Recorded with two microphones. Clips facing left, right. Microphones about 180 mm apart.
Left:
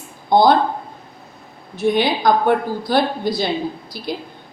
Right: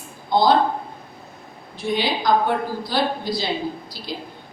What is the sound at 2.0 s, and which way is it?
A woman's voice, 55° left (ahead or behind).